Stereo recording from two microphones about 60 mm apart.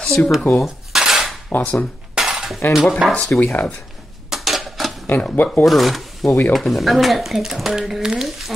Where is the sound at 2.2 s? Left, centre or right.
Centre.